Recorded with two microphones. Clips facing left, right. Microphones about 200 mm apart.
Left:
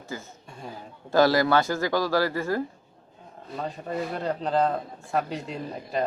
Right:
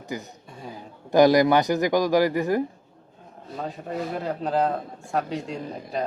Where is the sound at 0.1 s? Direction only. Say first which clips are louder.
Right 4 dB; 15° right (ahead or behind).